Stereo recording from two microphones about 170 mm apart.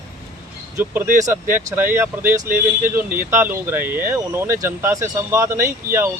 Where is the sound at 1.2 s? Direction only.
15° right (ahead or behind).